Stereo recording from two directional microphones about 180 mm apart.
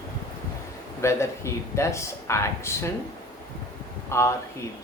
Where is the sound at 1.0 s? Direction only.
15° left (ahead or behind).